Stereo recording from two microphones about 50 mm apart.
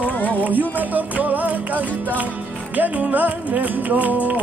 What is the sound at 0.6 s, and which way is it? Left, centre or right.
Music, right.